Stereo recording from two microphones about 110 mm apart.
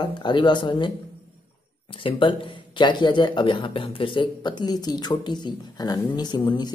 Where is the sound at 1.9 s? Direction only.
50° left (ahead or behind).